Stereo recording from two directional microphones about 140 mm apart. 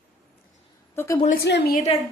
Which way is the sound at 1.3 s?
85° left.